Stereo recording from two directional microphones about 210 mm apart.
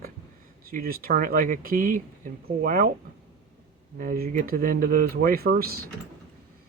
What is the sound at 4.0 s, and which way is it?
Speech, 45° right (ahead or behind).